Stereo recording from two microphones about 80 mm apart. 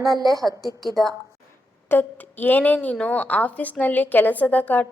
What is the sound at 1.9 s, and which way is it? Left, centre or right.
A woman's voice, left.